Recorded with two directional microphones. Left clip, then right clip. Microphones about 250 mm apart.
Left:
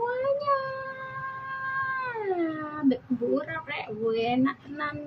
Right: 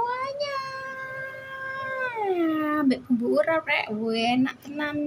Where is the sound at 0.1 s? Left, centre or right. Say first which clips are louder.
Left 1 dB; right.